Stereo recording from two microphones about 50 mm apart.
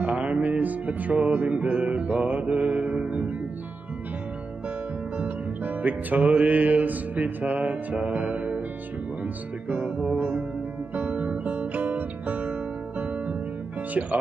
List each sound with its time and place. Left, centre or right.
0.0 s music: right
5.1 s music: right
9.2 s speech: right
10.1 s music: right
13.0 s guitar: right